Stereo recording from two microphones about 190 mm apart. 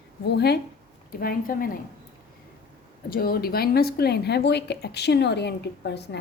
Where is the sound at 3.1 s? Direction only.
50° left (ahead or behind).